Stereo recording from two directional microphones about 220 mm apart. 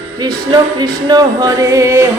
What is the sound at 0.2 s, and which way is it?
Music, 20° right (ahead or behind).